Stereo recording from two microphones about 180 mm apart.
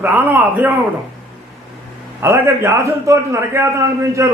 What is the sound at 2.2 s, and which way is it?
A man's voice, 15° right (ahead or behind).